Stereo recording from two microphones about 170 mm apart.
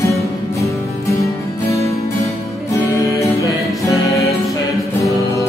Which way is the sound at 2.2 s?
20° left (ahead or behind).